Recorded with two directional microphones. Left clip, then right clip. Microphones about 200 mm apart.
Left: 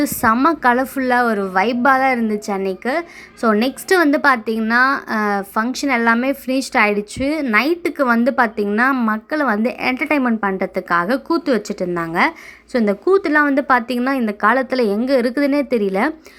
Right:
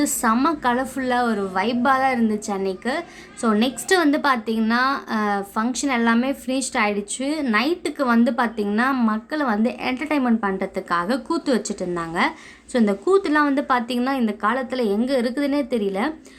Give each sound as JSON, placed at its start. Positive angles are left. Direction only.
{"t": 0.0, "sound": "a woman's voice", "side_deg": 25}